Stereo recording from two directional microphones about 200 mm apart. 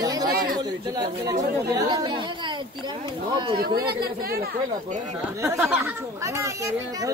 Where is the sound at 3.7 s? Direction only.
50° right (ahead or behind).